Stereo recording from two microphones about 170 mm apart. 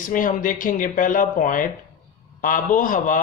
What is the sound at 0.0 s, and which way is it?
Speech, 55° left (ahead or behind).